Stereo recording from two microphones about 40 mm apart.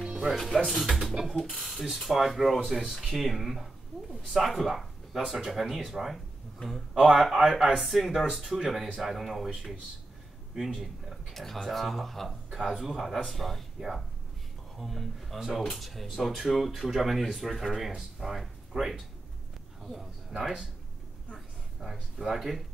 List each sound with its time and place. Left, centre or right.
0.0 s music: centre
0.3 s speech: centre
1.2 s speech: centre
3.9 s speech: right
4.3 s speech: centre
5.5 s speech: centre
10.5 s speech: centre
11.3 s speech: centre
12.4 s speech: centre
15.3 s speech: centre
15.6 s speech: centre
21.8 s speech: centre
22.3 s speech: centre